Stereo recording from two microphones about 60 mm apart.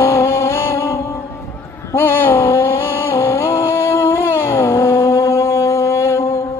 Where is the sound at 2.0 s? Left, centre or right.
Left.